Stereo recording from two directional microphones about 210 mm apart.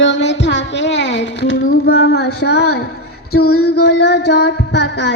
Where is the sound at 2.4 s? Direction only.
50° left (ahead or behind).